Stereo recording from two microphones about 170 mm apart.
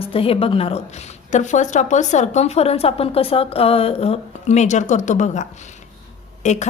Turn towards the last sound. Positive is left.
turn(degrees=45)  # may be behind; listen again after turning